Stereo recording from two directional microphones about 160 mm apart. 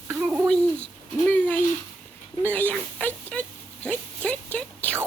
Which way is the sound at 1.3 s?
10° left (ahead or behind).